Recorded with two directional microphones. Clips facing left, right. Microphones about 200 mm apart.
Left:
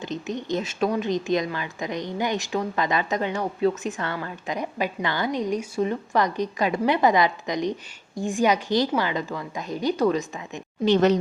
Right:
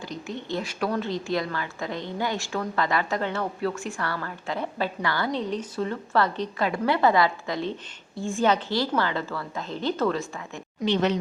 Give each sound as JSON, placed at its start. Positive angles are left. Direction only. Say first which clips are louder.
{"t": 0.0, "sound": "a woman's voice", "louder": "left 4 dB", "side_deg": 20}
{"t": 10.8, "sound": "speech", "louder": "left 5 dB", "side_deg": 40}